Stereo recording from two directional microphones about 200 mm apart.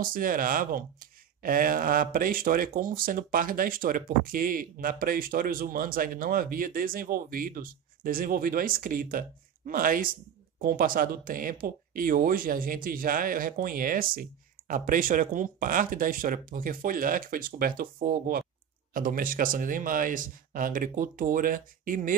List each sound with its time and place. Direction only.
0.0 s speech: 45° right (ahead or behind)